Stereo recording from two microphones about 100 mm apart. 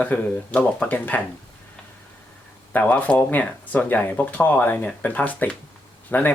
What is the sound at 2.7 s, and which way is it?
Speech, 15° left (ahead or behind).